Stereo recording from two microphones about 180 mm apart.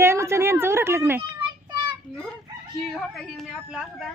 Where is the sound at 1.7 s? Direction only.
25° right (ahead or behind).